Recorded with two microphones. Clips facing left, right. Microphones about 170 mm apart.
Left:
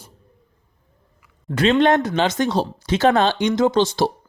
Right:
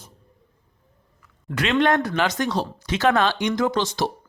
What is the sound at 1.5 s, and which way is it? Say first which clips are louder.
Speech: left 4 dB; 25° left (ahead or behind).